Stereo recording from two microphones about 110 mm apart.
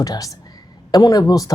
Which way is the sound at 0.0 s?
35° left (ahead or behind).